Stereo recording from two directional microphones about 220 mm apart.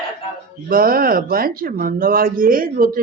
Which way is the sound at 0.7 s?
40° right (ahead or behind).